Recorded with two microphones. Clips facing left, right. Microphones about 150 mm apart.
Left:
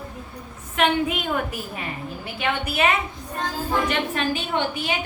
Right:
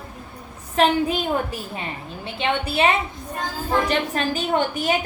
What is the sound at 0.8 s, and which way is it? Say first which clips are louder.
A woman's voice: right 3 dB; 35° right (ahead or behind).